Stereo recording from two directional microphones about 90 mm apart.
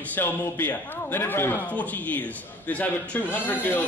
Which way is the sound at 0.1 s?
20° left (ahead or behind).